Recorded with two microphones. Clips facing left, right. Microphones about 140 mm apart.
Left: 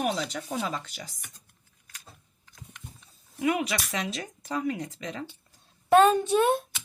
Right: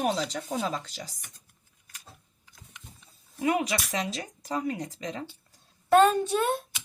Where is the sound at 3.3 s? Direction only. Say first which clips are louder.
Even; 40° right (ahead or behind).